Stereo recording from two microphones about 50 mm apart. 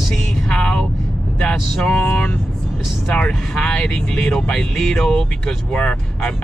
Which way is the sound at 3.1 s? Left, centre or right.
Centre.